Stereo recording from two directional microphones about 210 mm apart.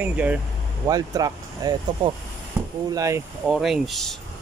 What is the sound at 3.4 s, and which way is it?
Speech, centre (ahead or behind).